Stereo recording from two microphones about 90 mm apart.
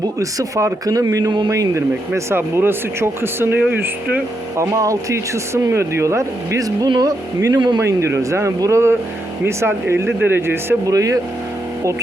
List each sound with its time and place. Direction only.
0.2 s speech: 35° right (ahead or behind)
4.6 s speech: 35° right (ahead or behind)
7.8 s speech: 30° right (ahead or behind)
10.8 s speech: 40° right (ahead or behind)